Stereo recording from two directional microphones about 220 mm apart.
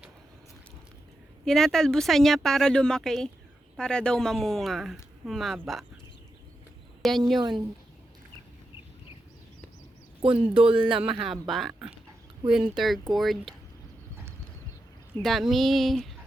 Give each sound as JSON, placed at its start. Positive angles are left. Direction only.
{"t": 1.5, "sound": "speech", "side_deg": 0}
{"t": 7.0, "sound": "speech", "side_deg": 0}
{"t": 10.2, "sound": "speech", "side_deg": -25}
{"t": 10.8, "sound": "speech", "side_deg": -5}
{"t": 15.2, "sound": "speech", "side_deg": 0}